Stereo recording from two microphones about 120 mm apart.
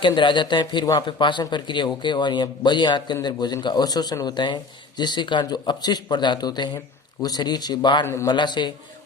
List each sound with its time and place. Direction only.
0.0 s speech: 40° left (ahead or behind)
8.0 s a man's voice: 20° left (ahead or behind)
8.3 s speech: 40° left (ahead or behind)